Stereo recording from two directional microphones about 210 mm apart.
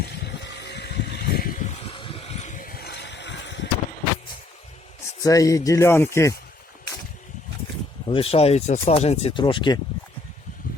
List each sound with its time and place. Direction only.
0.0 s vehicle: 50° left (ahead or behind)
5.2 s speech: 15° left (ahead or behind)
8.0 s speech: 25° left (ahead or behind)